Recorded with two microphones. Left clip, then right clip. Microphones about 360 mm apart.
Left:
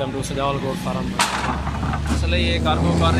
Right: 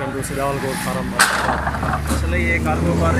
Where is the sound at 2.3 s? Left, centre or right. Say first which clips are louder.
Right 2 dB; left.